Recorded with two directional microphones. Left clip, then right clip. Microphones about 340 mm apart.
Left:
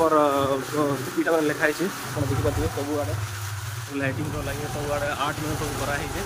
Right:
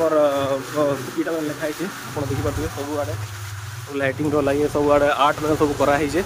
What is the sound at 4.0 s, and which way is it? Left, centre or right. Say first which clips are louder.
Speech: right 9 dB; centre.